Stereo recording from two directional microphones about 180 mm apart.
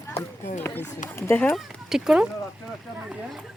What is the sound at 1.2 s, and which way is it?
Speech, 10° left (ahead or behind).